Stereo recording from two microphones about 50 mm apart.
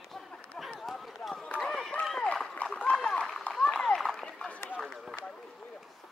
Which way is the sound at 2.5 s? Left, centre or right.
Left.